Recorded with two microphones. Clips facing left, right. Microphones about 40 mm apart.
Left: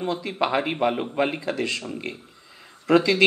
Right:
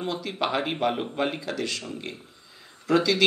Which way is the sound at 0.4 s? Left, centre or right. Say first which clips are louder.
Left 3 dB; left.